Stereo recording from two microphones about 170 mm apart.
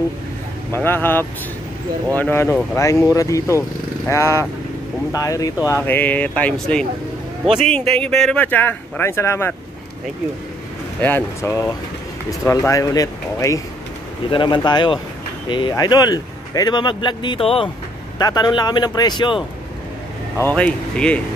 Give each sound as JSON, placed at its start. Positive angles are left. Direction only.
{"t": 0.7, "sound": "a man's voice", "side_deg": 10}
{"t": 11.0, "sound": "a man's voice", "side_deg": 10}
{"t": 20.5, "sound": "speech", "side_deg": 5}